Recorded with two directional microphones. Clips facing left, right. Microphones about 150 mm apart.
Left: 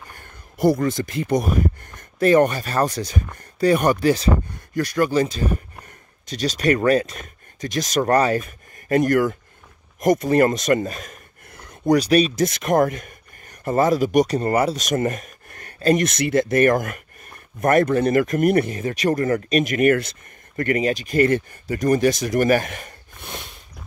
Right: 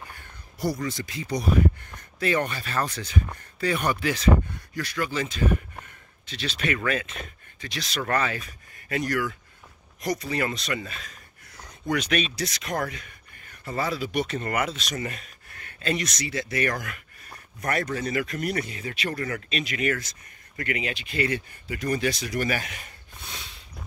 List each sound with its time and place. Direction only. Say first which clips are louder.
0.1 s speech: left 3 dB; 50° left (ahead or behind); by 4.3 s 35° left (ahead or behind)
4.7 s speech: left 10 dB; 45° left (ahead or behind)
9.9 s a sound: left 11 dB; 50° left (ahead or behind)
11.9 s speech: left 10 dB; 35° left (ahead or behind)
12.4 s speech: left 11 dB; 50° left (ahead or behind)